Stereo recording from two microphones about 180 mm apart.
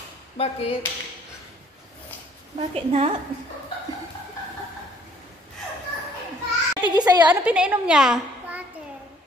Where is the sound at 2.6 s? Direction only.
35° right (ahead or behind).